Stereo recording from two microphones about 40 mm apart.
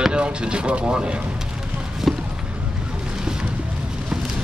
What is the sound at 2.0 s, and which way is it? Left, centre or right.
Basketball bounce, centre.